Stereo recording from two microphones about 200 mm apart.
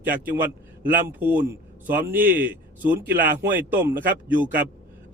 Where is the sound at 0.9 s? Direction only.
45° right (ahead or behind).